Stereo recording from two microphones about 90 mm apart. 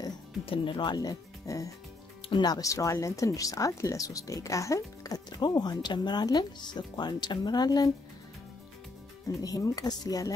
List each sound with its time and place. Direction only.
0.5 s speech: 65° left (ahead or behind); by 5.2 s 40° left (ahead or behind)
5.4 s speech: 50° left (ahead or behind)
9.4 s speech: 45° left (ahead or behind)